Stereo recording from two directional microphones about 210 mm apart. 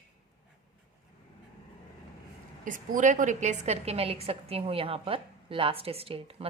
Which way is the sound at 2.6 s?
40° right (ahead or behind).